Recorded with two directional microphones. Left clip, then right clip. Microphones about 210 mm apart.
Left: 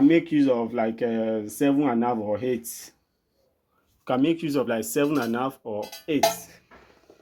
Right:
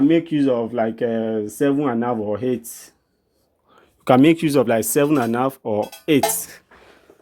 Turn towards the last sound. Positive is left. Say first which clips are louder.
# right 5 dB
turn(degrees=-55)  # may be behind; listen again after turning